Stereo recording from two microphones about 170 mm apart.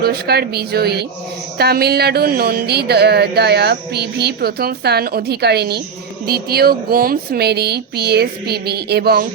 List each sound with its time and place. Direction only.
0.0 s speech: 65° right (ahead or behind)